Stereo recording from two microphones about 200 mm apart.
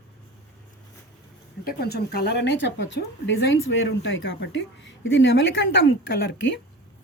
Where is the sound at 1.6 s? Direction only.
50° left (ahead or behind).